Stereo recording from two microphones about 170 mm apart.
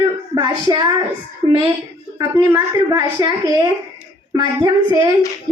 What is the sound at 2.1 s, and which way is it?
A woman's voice, 15° right (ahead or behind).